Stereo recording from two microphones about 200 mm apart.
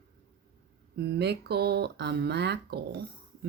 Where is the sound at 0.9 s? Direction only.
55° right (ahead or behind).